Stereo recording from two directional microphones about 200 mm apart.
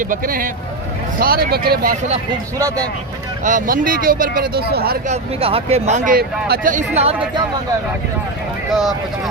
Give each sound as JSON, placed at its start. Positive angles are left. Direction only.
{"t": 0.0, "sound": "speech", "side_deg": -45}
{"t": 3.4, "sound": "speech", "side_deg": -40}
{"t": 5.0, "sound": "speech", "side_deg": -30}
{"t": 6.1, "sound": "speech", "side_deg": -45}
{"t": 8.7, "sound": "speech", "side_deg": 0}